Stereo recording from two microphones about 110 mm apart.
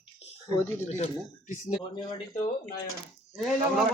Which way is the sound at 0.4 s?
30° left (ahead or behind).